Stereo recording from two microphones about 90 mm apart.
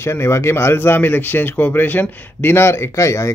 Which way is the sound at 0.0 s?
30° left (ahead or behind).